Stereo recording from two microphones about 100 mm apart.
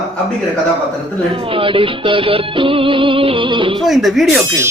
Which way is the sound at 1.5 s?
60° right (ahead or behind).